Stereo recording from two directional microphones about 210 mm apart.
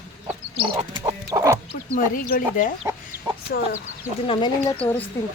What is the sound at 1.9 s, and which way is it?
Speech, 40° left (ahead or behind).